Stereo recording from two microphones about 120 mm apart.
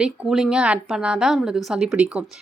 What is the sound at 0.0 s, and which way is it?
A woman's voice, 5° right (ahead or behind).